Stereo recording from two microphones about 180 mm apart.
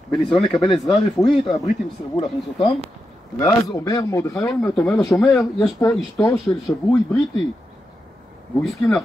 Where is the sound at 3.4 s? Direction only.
20° left (ahead or behind).